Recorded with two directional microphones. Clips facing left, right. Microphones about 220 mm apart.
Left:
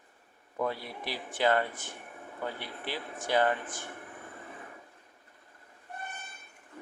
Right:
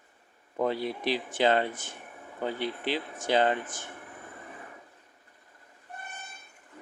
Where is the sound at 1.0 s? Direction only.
20° right (ahead or behind).